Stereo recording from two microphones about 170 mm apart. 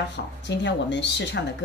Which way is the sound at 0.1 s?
90° left.